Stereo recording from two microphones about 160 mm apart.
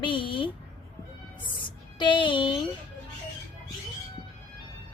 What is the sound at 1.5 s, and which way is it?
Music, 30° left (ahead or behind).